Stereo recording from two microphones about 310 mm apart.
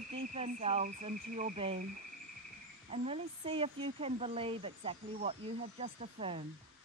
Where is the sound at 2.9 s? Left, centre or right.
Centre.